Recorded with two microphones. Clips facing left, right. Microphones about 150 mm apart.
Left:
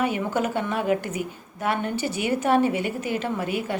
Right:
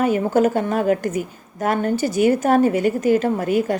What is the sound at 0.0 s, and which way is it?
A woman's voice, 40° right (ahead or behind).